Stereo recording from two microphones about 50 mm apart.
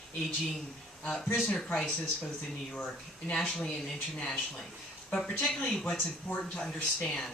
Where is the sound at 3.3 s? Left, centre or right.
Centre.